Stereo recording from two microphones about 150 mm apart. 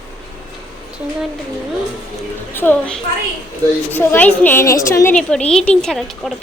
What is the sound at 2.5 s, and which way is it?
Speech, 15° left (ahead or behind).